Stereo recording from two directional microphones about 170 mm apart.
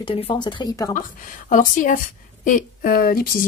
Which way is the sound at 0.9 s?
50° left (ahead or behind).